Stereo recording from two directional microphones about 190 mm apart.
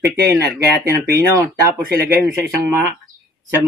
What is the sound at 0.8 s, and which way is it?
Speech, 15° right (ahead or behind).